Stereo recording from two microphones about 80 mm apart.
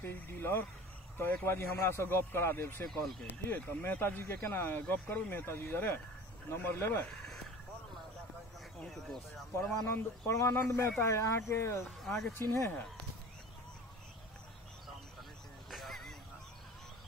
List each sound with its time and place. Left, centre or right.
0.0 s speech: left
2.9 s speech: centre
3.4 s speech: left
8.7 s speech: centre
9.6 s speech: left
11.8 s speech: centre
15.7 s a sound: centre